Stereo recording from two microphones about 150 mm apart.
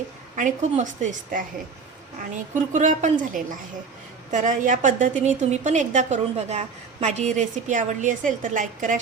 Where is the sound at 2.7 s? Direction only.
55° right (ahead or behind).